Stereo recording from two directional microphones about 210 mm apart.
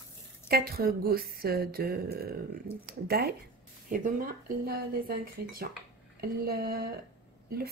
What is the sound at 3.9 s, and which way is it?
Speech, 40° right (ahead or behind).